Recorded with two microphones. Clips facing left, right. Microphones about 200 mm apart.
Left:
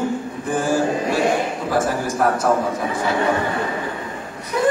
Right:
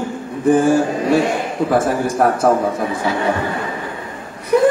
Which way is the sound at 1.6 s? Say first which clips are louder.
Right 7 dB; 55° right (ahead or behind).